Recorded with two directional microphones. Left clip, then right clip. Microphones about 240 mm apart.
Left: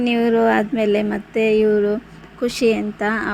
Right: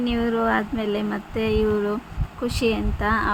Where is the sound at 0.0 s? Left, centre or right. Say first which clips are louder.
Left 6 dB; centre.